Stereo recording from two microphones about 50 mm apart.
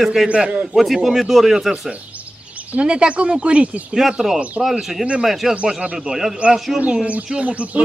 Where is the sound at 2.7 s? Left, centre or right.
Right.